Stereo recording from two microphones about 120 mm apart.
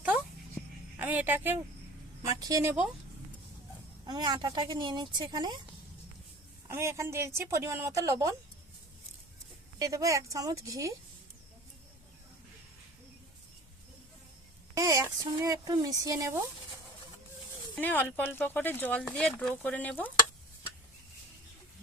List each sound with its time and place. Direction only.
0.9 s speech: 15° right (ahead or behind)
2.2 s speech: 30° right (ahead or behind)
4.0 s speech: 35° right (ahead or behind)
6.7 s a woman's voice: 25° right (ahead or behind)
9.7 s a woman's voice: 30° right (ahead or behind)
14.8 s a woman's voice: 30° right (ahead or behind)
17.7 s speech: 15° left (ahead or behind)